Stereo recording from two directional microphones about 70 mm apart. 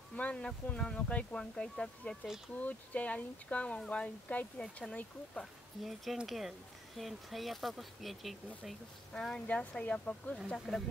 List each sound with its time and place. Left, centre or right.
0.1 s speech: centre
2.2 s speech: centre
2.5 s speech: left
5.4 s speech: centre
9.1 s speech: centre
10.7 s speech: centre